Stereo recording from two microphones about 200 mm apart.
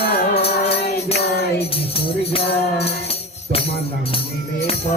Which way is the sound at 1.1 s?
55° left (ahead or behind).